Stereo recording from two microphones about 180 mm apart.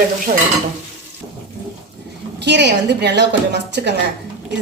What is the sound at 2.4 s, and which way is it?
A woman's voice, 70° right (ahead or behind).